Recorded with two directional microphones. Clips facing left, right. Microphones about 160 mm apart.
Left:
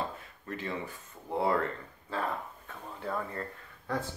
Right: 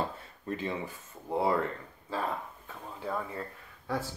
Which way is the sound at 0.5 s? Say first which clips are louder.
Right 3 dB; 20° right (ahead or behind).